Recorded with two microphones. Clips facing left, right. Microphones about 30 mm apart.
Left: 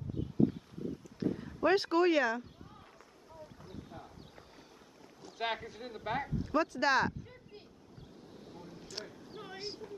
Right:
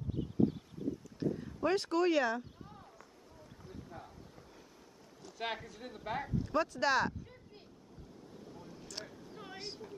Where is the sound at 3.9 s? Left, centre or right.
Left.